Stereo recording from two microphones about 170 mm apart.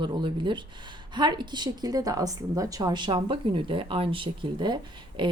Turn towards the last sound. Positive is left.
turn(degrees=-30)  # may be behind; listen again after turning